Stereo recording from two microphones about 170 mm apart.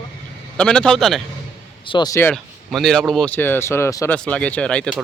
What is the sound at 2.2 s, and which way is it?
A man's voice, 5° left (ahead or behind).